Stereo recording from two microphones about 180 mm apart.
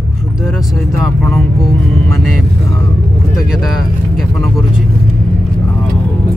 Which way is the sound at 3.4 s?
Centre (ahead or behind).